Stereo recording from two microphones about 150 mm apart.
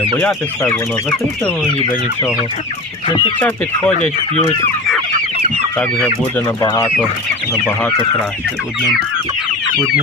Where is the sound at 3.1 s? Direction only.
35° left (ahead or behind).